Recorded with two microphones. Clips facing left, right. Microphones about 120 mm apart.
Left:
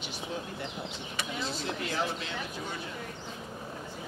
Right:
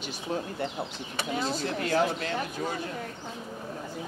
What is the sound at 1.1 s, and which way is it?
Speech, 40° right (ahead or behind).